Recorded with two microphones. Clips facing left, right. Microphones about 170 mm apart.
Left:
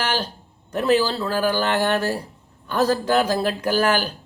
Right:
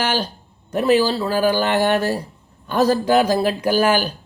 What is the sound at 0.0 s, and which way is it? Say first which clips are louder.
A man's voice: right 3 dB; 15° right (ahead or behind).